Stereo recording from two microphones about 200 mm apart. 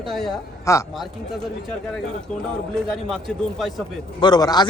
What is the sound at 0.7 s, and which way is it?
Speech, 15° left (ahead or behind).